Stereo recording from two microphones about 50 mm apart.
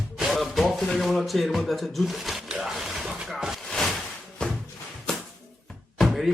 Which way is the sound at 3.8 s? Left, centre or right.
Centre.